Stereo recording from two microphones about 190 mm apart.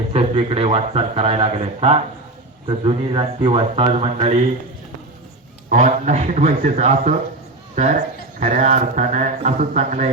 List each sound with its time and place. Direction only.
0.1 s speech: 30° right (ahead or behind)
5.6 s speech: 40° right (ahead or behind)